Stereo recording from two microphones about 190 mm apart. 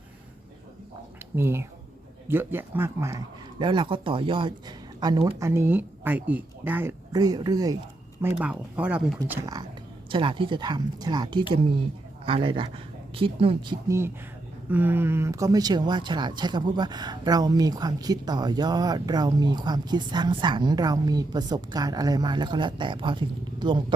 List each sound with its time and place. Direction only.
1.4 s speech: 15° right (ahead or behind)
8.4 s speech: 5° right (ahead or behind)
10.1 s speech: 25° right (ahead or behind)